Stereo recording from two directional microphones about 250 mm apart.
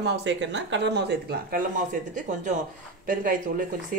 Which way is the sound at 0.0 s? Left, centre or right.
Right.